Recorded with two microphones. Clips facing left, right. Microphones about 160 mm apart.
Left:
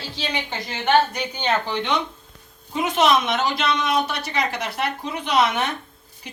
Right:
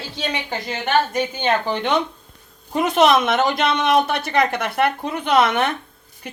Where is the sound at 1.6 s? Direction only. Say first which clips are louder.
Right 4 dB; 50° right (ahead or behind).